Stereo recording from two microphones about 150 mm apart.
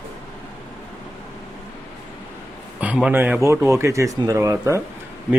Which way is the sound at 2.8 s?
5° right (ahead or behind).